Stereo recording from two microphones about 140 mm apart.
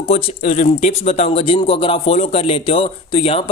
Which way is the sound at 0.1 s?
55° left (ahead or behind).